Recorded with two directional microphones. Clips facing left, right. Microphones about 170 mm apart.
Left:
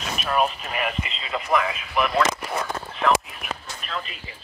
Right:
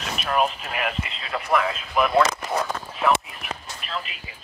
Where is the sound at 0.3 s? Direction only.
5° right (ahead or behind).